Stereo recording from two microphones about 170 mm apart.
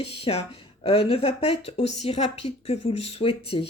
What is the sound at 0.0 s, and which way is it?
Speech, 35° left (ahead or behind).